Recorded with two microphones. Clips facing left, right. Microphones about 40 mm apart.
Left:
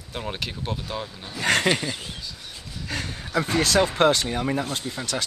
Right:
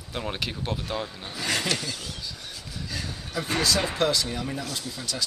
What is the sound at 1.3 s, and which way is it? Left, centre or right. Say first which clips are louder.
Speech: left 7 dB; left.